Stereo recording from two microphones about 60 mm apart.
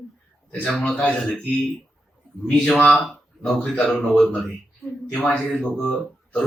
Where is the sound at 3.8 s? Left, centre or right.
Centre.